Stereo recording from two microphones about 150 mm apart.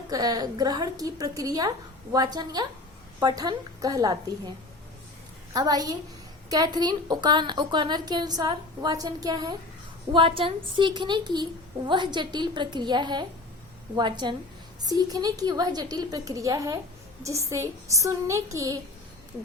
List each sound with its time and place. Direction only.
0.1 s a woman's voice: 25° right (ahead or behind)
5.5 s a woman's voice: 25° right (ahead or behind)